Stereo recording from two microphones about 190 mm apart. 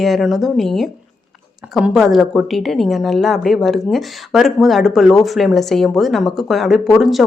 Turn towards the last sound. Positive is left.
turn(degrees=0)  # may be behind; listen again after turning